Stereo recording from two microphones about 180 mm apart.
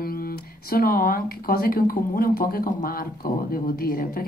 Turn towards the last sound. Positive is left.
turn(degrees=55)  # may be behind; listen again after turning